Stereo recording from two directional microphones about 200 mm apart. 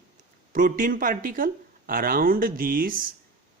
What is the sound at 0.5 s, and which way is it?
Speech, 40° right (ahead or behind).